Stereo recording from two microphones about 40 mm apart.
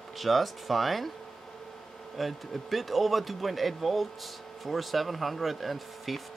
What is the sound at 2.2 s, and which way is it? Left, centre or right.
Speech, centre.